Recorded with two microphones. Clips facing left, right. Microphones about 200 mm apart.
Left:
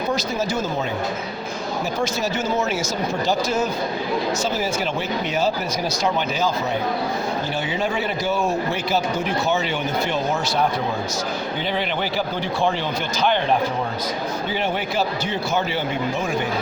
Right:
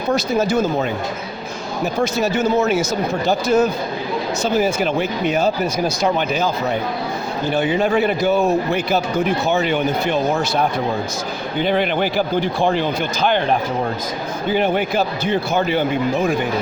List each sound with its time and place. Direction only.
0.3 s a man's voice: 60° right (ahead or behind)
2.0 s a man's voice: 60° right (ahead or behind)
7.5 s a man's voice: 60° right (ahead or behind)
11.6 s speech: 50° right (ahead or behind)
14.5 s a man's voice: 55° right (ahead or behind)